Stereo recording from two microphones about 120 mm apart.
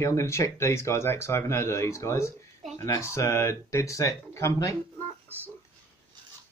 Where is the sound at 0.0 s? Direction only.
25° left (ahead or behind).